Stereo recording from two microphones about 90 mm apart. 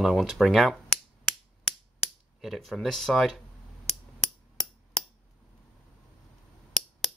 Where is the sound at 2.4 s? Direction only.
Centre (ahead or behind).